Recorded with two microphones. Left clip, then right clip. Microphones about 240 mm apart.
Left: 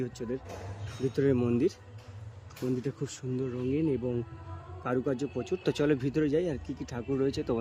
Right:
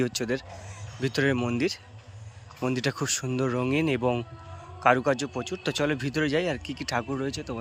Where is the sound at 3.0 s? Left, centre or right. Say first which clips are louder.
Right 7 dB; centre.